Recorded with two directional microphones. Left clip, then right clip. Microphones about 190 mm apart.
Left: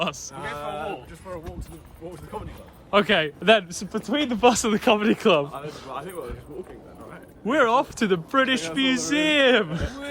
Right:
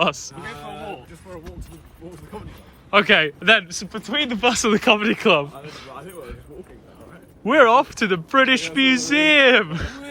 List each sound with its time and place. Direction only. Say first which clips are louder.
0.0 s a man's voice: right 6 dB; 10° left (ahead or behind)
2.9 s a man's voice: right 5 dB; 15° left (ahead or behind)
3.7 s speech: right 1 dB; 30° left (ahead or behind)
4.7 s a man's voice: right 3 dB; 10° left (ahead or behind)
7.4 s a man's voice: right 6 dB; 10° left (ahead or behind)